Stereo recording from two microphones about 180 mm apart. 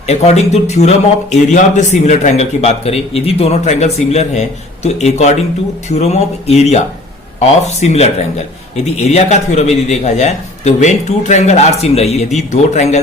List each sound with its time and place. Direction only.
0.1 s a man's voice: 35° left (ahead or behind)